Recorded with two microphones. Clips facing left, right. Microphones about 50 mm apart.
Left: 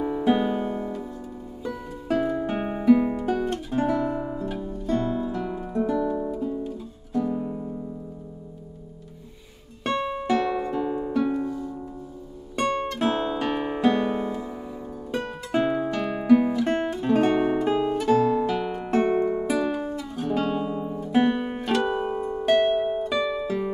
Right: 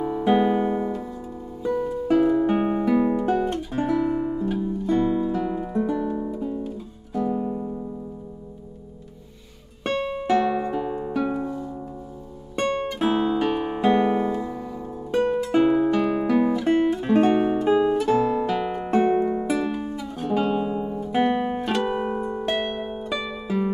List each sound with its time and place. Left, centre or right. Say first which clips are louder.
0.0 s music: right 1 dB; centre
0.3 s music: right 4 dB; centre
5.9 s guitar: left 1 dB; centre
7.2 s music: right 2 dB; centre
9.8 s music: right 1 dB; centre
12.5 s guitar: right 1 dB; centre
13.7 s music: right 3 dB; centre
15.5 s guitar: right 3 dB; centre
22.5 s harp: left 10 dB; centre